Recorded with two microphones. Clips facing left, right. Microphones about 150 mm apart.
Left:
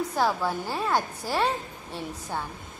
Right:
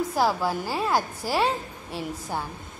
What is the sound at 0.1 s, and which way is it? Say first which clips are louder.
A woman's voice: right 1 dB; 5° right (ahead or behind).